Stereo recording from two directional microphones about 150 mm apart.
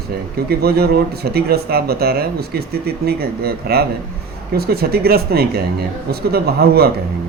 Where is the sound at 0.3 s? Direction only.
90° right.